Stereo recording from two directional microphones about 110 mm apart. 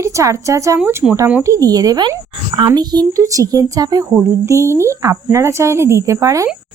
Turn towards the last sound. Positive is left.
turn(degrees=-30)  # may be behind; listen again after turning